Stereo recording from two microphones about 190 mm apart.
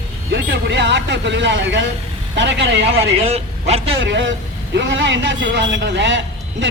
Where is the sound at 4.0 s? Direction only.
70° right (ahead or behind).